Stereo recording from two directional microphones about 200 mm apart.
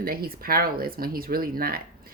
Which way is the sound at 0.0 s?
45° right (ahead or behind).